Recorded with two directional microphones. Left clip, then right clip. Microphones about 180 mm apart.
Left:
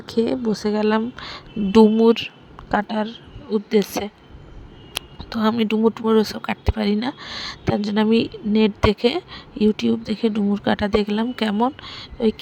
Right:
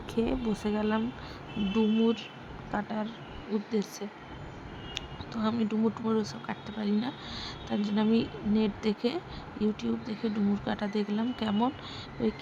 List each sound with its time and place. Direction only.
0.1 s speech: 30° left (ahead or behind); by 12.3 s 50° left (ahead or behind)